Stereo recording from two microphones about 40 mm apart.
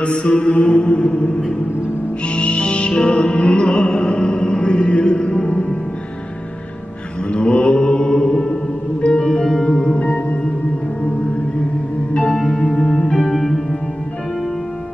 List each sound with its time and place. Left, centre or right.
0.0 s mantra: left
2.2 s owl: left
2.9 s music: left
7.2 s music: left
9.9 s music: left
12.3 s music: centre